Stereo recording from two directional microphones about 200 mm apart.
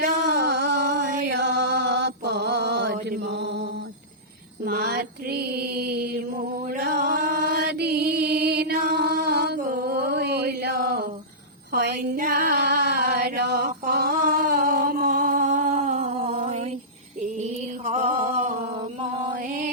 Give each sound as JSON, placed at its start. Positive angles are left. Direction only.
{"t": 0.0, "sound": "chant", "side_deg": -55}
{"t": 4.6, "sound": "mantra", "side_deg": -50}
{"t": 11.7, "sound": "a sound", "side_deg": -45}
{"t": 17.8, "sound": "a sound", "side_deg": -35}
{"t": 18.7, "sound": "music", "side_deg": -30}
{"t": 19.3, "sound": "mantra", "side_deg": -45}